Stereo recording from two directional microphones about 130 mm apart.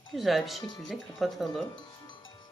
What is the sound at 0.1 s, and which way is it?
Speech, centre (ahead or behind).